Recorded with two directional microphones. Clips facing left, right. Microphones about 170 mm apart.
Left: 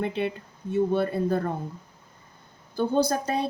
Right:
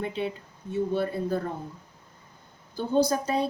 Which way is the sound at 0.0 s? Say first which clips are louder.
Left 3 dB; 60° left (ahead or behind).